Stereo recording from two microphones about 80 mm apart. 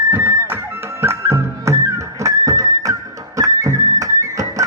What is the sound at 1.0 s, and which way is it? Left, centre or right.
Music, right.